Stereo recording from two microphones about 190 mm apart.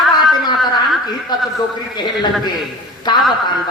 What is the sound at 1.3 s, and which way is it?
A man's voice, 20° left (ahead or behind).